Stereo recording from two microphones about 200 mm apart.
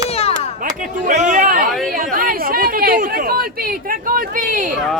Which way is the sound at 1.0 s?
35° right (ahead or behind).